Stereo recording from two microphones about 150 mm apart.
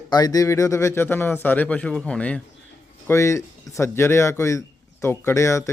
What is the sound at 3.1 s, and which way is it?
A man's voice, 20° left (ahead or behind).